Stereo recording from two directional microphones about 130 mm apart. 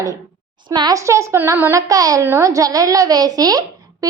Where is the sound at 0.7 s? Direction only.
30° right (ahead or behind).